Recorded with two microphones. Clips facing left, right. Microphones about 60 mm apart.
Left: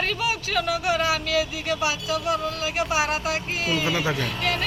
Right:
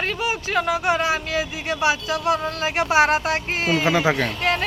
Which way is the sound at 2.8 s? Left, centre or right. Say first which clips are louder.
Right 7 dB; right.